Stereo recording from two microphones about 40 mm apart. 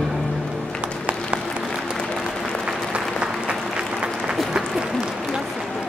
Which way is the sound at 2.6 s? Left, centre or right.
Right.